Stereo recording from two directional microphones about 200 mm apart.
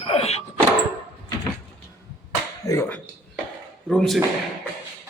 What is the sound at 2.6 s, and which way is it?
Speech, 15° left (ahead or behind).